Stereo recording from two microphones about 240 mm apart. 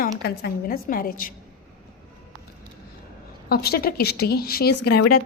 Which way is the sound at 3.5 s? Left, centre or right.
Left.